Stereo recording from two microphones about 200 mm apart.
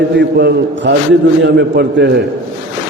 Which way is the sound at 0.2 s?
55° right (ahead or behind).